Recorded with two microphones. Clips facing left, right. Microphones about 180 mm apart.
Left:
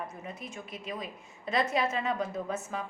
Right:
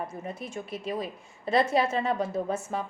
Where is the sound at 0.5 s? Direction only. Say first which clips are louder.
Right 9 dB; 30° right (ahead or behind).